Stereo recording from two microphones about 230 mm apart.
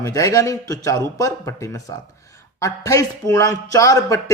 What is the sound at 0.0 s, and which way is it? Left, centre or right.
Speech, centre.